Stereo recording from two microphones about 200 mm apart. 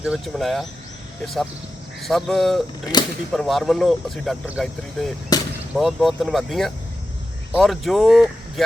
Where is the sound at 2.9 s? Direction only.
20° left (ahead or behind).